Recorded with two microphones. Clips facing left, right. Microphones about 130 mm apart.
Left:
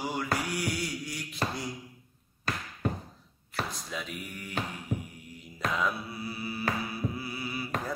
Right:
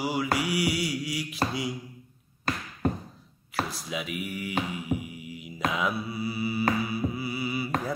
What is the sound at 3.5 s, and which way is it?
Speech, 5° right (ahead or behind).